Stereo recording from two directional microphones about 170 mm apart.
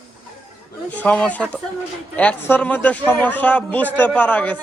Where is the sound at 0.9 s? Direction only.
5° left (ahead or behind).